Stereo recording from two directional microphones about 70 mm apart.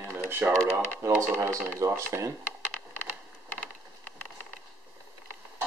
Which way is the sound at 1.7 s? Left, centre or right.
Right.